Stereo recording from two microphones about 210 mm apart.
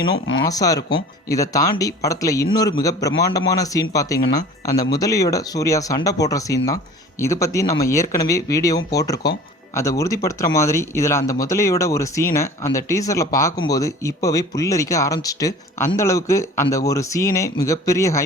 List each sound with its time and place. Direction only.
0.4 s speech: 15° left (ahead or behind)